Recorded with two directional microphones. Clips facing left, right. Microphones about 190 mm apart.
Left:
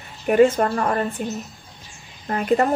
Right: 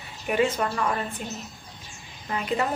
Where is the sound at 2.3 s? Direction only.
50° left (ahead or behind).